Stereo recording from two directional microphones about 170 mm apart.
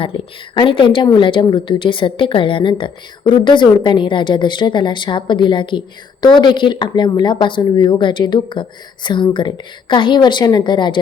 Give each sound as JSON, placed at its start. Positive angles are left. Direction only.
{"t": 0.0, "sound": "a woman's voice", "side_deg": 30}